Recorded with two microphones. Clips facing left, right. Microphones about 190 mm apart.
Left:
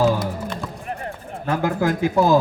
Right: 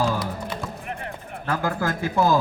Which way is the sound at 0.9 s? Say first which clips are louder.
Left 3 dB; 35° left (ahead or behind).